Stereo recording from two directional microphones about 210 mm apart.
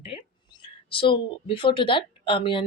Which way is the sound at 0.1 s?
25° left (ahead or behind).